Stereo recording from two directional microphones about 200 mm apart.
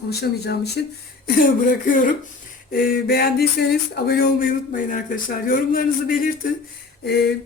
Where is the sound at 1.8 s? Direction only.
40° left (ahead or behind).